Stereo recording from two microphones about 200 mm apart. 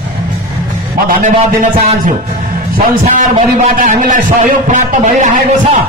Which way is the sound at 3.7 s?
40° right (ahead or behind).